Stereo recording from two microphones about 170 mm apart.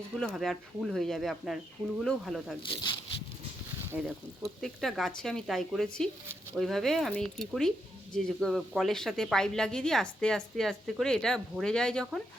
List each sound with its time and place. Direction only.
0.3 s speech: centre (ahead or behind)
2.6 s speech: 30° left (ahead or behind)
3.9 s speech: 5° right (ahead or behind)